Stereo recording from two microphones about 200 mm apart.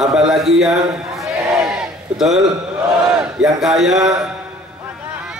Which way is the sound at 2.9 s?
5° right (ahead or behind).